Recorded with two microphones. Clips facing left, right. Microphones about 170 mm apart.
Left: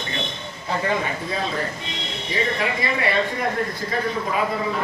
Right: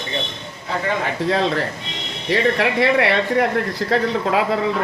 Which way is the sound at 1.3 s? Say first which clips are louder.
Right 9 dB; 80° right.